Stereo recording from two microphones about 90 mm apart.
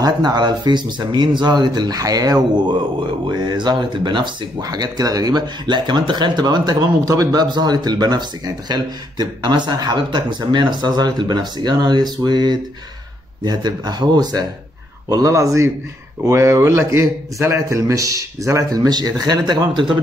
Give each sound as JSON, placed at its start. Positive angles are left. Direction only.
{"t": 0.0, "sound": "speech", "side_deg": -50}
{"t": 4.6, "sound": "a man's voice", "side_deg": -45}